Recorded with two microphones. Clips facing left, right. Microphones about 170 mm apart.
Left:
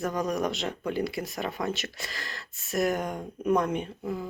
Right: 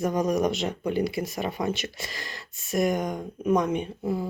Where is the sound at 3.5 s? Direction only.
15° right (ahead or behind).